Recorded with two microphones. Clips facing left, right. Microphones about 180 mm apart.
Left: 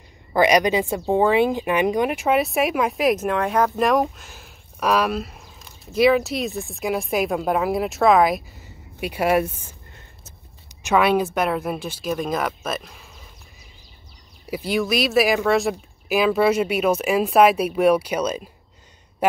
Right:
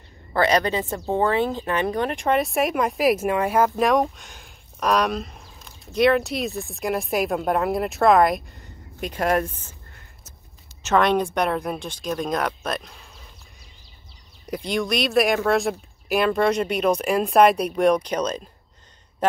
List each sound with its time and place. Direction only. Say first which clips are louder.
0.3 s speech: left 3 dB; 15° left (ahead or behind)
10.8 s speech: left 1 dB; 10° left (ahead or behind)
14.4 s speech: left 2 dB; 5° left (ahead or behind)